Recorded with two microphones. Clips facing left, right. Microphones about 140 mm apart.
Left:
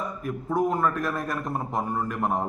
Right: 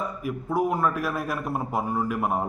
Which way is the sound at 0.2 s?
10° right (ahead or behind).